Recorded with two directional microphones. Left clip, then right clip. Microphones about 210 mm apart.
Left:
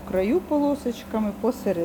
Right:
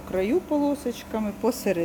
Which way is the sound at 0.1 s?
5° right (ahead or behind).